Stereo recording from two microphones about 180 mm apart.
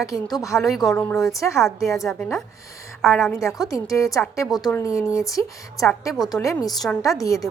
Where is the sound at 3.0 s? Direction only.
15° left (ahead or behind).